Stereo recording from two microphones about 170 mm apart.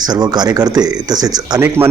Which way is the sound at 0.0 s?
25° right (ahead or behind).